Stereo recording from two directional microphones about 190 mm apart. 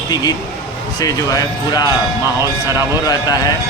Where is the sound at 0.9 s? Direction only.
20° left (ahead or behind).